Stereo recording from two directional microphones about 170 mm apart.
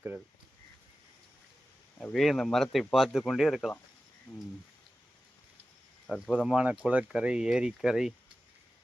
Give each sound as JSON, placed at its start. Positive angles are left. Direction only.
{"t": 2.0, "sound": "speech", "side_deg": 5}
{"t": 6.1, "sound": "speech", "side_deg": 5}